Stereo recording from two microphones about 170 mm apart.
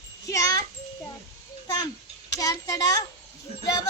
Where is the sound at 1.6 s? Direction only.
25° left (ahead or behind).